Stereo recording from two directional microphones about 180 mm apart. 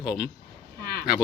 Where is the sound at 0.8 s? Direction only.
55° left (ahead or behind).